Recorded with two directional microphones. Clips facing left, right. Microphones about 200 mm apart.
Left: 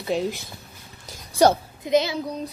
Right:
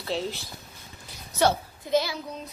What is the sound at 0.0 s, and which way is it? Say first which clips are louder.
Speech: left 5 dB; 15° left (ahead or behind).